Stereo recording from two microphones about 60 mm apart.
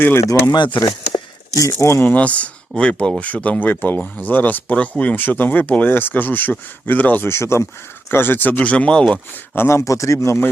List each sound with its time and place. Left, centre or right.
0.3 s speech: left
2.0 s speech: left
7.3 s speech: left
8.1 s speech: left; by 9.2 s centre
9.6 s speech: left
9.8 s speech: left